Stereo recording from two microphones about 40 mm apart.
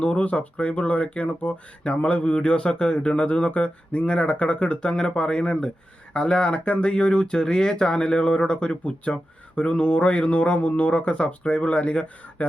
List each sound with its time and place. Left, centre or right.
0.0 s speech: left